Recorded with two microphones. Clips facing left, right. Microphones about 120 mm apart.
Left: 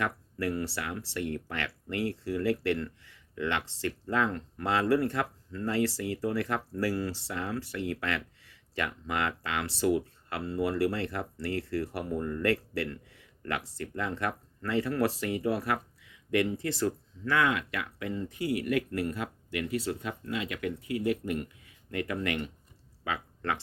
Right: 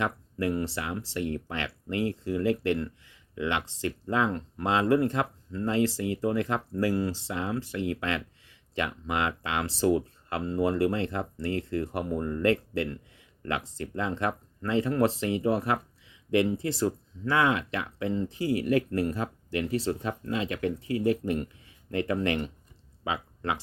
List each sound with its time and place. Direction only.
0.0 s speech: 20° right (ahead or behind)
23.0 s speech: 20° right (ahead or behind)